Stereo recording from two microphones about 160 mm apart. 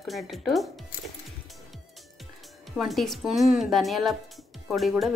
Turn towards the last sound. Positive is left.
turn(degrees=0)  # may be behind; listen again after turning